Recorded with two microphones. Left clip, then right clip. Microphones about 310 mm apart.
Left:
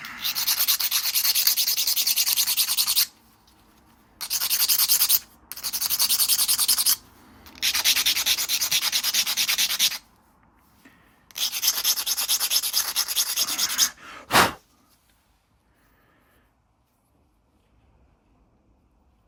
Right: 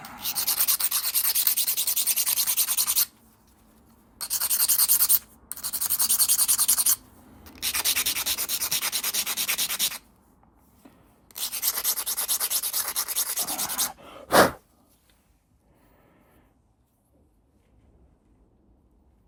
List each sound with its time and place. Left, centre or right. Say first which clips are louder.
0.2 s rub: left 5 dB; left
10.8 s rub: left 1 dB; centre
11.3 s rub: left 7 dB; left
14.0 s a sound: left 3 dB; centre
14.3 s sneeze: even; centre